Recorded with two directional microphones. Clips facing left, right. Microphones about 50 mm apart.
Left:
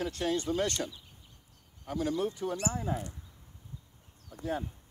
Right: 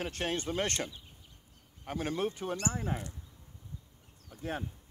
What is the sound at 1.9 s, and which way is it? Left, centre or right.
Speech, right.